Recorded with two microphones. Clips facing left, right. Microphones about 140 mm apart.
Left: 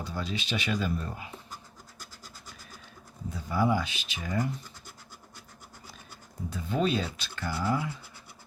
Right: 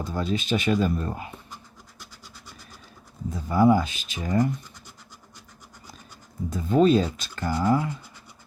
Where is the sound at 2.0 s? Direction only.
45° left (ahead or behind).